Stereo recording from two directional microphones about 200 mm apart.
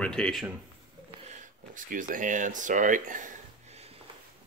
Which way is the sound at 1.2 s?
35° right (ahead or behind).